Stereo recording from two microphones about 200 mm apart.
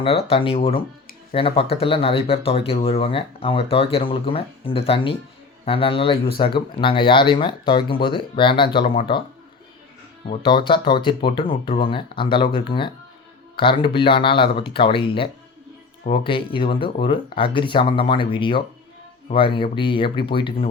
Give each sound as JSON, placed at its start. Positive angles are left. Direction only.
{"t": 0.0, "sound": "speech", "side_deg": 30}
{"t": 10.2, "sound": "speech", "side_deg": 25}